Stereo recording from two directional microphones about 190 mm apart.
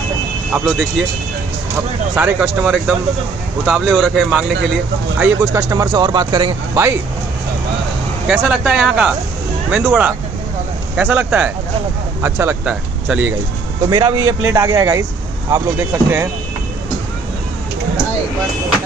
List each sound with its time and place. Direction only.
0.5 s speech: 5° right (ahead or behind)
2.1 s speech: 10° right (ahead or behind)
5.2 s speech: 15° right (ahead or behind)
8.3 s speech: 5° right (ahead or behind)
13.8 s a man's voice: 20° right (ahead or behind)